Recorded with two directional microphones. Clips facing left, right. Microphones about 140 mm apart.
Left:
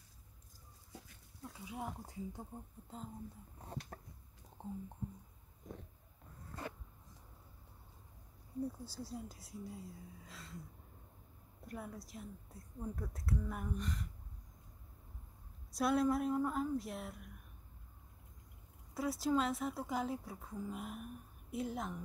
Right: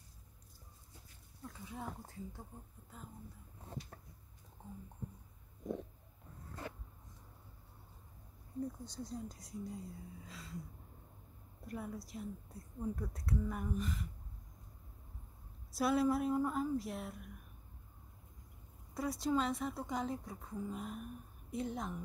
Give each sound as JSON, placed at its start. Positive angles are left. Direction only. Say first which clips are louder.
{"t": 1.4, "sound": "speech", "louder": "left 1 dB", "side_deg": 10}
{"t": 3.9, "sound": "a sound", "louder": "left 4 dB", "side_deg": 65}
{"t": 4.6, "sound": "a sound", "louder": "left 6 dB", "side_deg": 30}
{"t": 8.5, "sound": "speech", "louder": "even", "side_deg": 5}
{"t": 11.6, "sound": "speech", "louder": "right 3 dB", "side_deg": 0}
{"t": 15.7, "sound": "speech", "louder": "even", "side_deg": 0}
{"t": 18.9, "sound": "speech", "louder": "even", "side_deg": 0}